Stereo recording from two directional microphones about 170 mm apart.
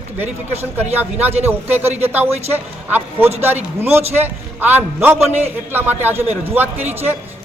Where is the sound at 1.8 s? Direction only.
40° right (ahead or behind).